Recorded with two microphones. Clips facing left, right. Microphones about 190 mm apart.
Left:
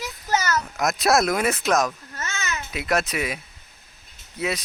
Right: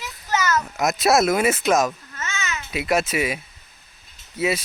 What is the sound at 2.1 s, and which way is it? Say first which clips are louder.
Babbling: right 1 dB; 40° left (ahead or behind).